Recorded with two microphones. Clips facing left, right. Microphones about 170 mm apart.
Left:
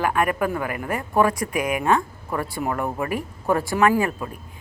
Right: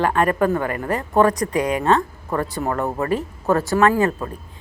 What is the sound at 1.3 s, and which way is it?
Speech, 35° right (ahead or behind).